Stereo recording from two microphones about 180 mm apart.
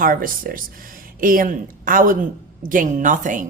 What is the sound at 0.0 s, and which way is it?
Speech, 50° right (ahead or behind).